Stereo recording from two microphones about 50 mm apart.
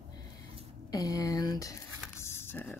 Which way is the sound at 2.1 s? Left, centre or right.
Left.